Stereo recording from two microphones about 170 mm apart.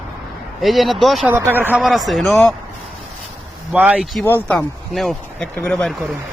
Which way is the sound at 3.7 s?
10° right (ahead or behind).